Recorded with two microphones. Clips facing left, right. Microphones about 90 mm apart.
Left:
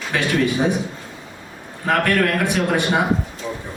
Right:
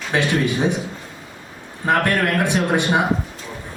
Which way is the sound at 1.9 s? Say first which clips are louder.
Even; 20° right (ahead or behind).